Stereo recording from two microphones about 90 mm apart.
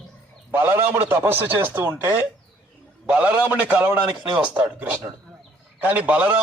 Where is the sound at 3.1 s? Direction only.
10° right (ahead or behind).